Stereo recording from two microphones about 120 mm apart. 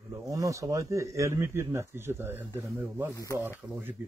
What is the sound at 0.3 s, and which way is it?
Speech, 30° right (ahead or behind).